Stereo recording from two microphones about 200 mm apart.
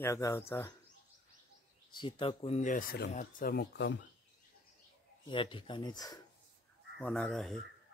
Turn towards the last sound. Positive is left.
turn(degrees=0)  # may be behind; listen again after turning